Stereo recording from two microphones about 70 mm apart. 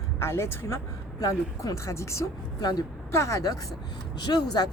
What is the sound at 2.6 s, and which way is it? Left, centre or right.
Speech, left.